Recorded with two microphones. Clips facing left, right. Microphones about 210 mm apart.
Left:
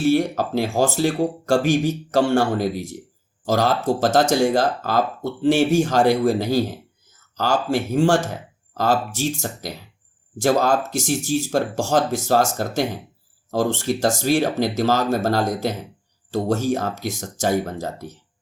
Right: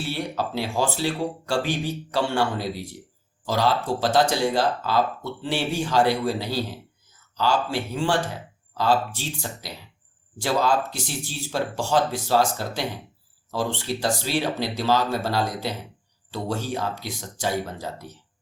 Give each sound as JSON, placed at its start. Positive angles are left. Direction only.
{"t": 0.0, "sound": "speech", "side_deg": 45}